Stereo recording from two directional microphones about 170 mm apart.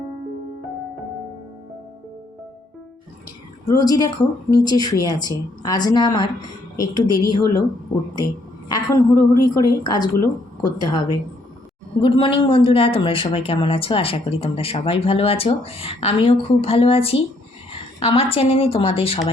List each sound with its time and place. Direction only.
3.7 s speech: 20° left (ahead or behind)
8.7 s speech: 20° left (ahead or behind)